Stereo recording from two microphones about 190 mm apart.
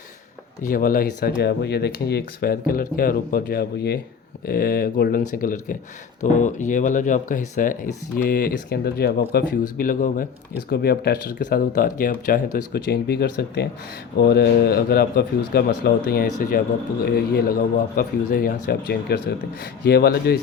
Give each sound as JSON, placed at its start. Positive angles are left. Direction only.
{"t": 0.6, "sound": "speech", "side_deg": 50}
{"t": 11.7, "sound": "speech", "side_deg": 45}